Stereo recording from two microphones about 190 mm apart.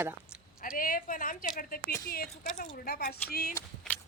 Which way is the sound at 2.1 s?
50° left (ahead or behind).